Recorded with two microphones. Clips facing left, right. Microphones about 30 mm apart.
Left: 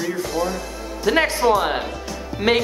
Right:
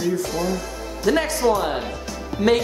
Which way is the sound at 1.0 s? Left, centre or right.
Left.